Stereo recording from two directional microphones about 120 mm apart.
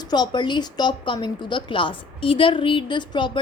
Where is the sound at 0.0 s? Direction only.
35° left (ahead or behind).